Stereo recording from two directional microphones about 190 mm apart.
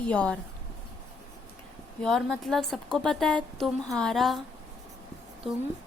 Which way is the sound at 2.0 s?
Centre (ahead or behind).